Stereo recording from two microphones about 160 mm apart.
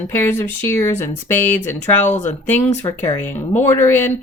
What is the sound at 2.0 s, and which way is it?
Speech, 45° left (ahead or behind).